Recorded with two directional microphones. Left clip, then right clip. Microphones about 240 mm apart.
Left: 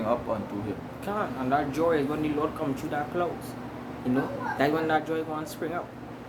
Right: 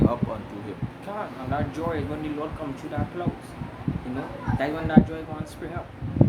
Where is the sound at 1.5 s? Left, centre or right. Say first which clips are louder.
Left 4 dB; centre.